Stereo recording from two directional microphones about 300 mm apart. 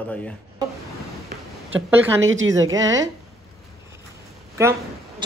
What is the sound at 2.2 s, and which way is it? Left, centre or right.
Speech, right.